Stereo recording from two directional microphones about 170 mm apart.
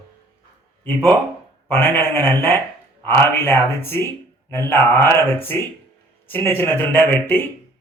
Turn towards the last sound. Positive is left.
turn(degrees=10)  # may be behind; listen again after turning